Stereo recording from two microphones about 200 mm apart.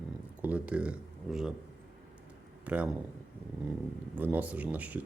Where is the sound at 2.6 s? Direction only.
5° right (ahead or behind).